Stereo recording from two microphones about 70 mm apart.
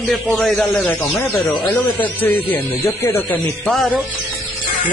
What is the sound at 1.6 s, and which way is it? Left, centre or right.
Speech, left.